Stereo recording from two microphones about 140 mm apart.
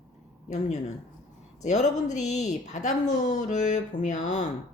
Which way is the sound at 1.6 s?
55° left (ahead or behind).